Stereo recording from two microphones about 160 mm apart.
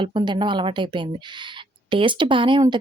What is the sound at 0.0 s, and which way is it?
Speech, 30° right (ahead or behind).